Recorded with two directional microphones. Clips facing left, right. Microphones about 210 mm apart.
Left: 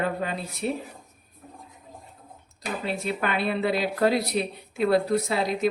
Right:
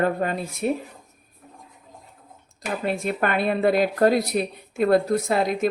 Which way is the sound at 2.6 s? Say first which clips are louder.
Right 4 dB; 50° right (ahead or behind).